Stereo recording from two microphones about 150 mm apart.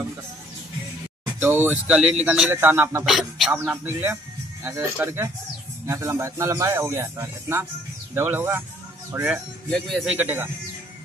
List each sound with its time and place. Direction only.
1.4 s speech: 10° right (ahead or behind)
3.1 s speech: centre (ahead or behind)
3.5 s speech: 15° right (ahead or behind)